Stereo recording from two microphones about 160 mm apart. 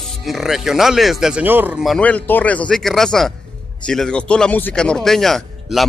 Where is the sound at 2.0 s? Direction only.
10° left (ahead or behind).